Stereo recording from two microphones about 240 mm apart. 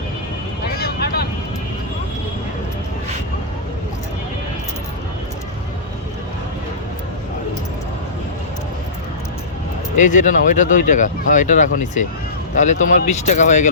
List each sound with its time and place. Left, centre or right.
0.8 s vehicle: left
10.0 s speech: left